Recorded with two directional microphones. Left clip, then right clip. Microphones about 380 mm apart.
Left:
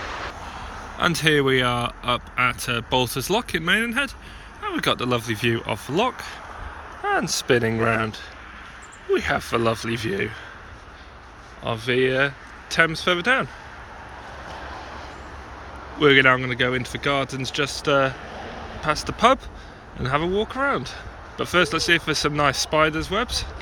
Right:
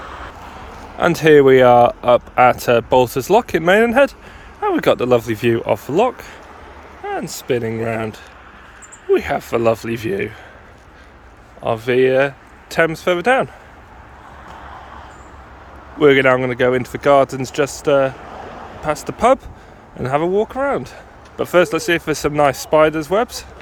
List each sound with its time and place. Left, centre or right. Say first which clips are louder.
0.0 s a sound: left 1 dB; left
0.9 s speech: right 9 dB; centre
11.6 s speech: right 7 dB; centre
16.0 s speech: right 4 dB; centre
18.3 s a sound: right 3 dB; right
18.8 s speech: right 2 dB; centre